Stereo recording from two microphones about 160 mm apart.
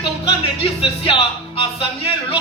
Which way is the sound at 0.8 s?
35° left (ahead or behind).